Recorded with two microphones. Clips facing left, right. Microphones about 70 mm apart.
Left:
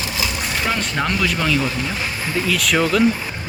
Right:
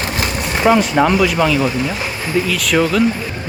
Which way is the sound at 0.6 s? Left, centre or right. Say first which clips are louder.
Right 11 dB; centre.